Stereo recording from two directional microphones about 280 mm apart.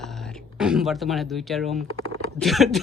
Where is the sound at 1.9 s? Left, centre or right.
Right.